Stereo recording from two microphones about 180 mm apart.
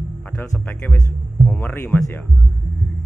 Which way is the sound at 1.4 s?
10° left (ahead or behind).